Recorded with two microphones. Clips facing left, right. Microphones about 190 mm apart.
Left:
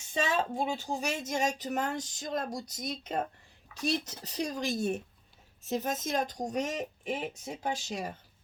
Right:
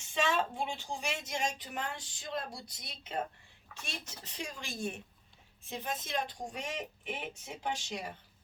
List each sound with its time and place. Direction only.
0.1 s a woman's voice: 40° left (ahead or behind)